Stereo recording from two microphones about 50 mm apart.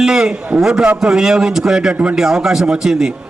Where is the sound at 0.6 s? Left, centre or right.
Centre.